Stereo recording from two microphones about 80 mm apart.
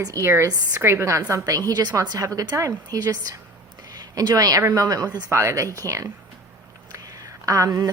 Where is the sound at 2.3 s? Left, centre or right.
Right.